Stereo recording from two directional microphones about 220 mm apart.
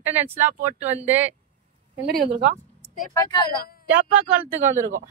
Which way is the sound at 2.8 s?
35° left (ahead or behind).